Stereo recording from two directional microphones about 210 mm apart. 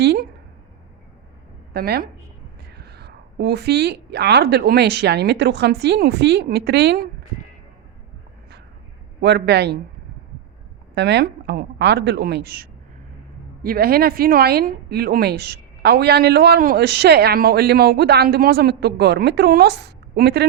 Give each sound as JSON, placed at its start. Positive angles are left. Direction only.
{"t": 0.0, "sound": "speech", "side_deg": -50}
{"t": 1.7, "sound": "speech", "side_deg": -45}
{"t": 9.2, "sound": "speech", "side_deg": -50}
{"t": 10.9, "sound": "speech", "side_deg": -55}